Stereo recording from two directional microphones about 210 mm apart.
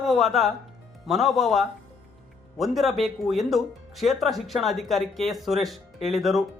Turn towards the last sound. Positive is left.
turn(degrees=0)  # may be behind; listen again after turning